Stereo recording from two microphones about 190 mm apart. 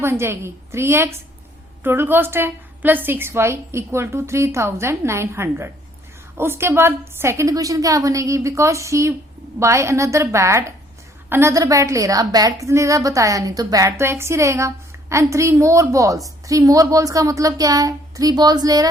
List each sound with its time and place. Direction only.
0.0 s a woman's voice: 15° right (ahead or behind)